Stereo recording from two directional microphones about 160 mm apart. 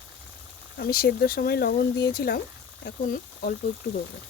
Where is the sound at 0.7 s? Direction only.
75° left (ahead or behind).